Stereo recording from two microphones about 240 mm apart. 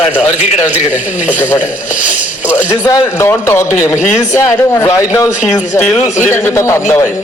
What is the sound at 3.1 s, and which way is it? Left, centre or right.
Speech, centre.